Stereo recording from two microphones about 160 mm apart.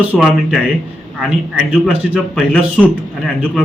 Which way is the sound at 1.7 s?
5° right (ahead or behind).